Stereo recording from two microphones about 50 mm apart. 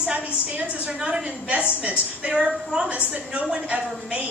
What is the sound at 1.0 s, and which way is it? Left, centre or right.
Speech, centre.